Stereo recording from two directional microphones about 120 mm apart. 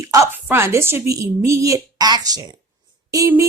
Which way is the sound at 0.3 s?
20° right (ahead or behind).